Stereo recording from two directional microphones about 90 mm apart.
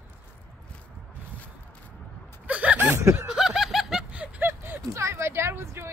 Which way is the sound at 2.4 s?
15° right (ahead or behind).